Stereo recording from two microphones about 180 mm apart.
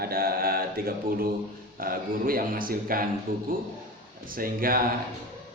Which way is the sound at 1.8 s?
50° right (ahead or behind).